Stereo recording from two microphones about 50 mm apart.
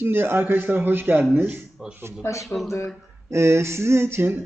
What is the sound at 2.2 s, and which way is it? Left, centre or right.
Speech, left.